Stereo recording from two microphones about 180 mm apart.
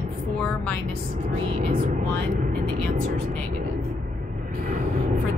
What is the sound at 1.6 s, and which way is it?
Speech, 40° right (ahead or behind).